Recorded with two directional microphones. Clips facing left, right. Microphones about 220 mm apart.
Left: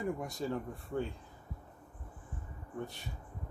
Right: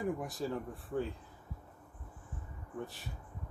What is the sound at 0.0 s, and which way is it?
Speech, centre (ahead or behind).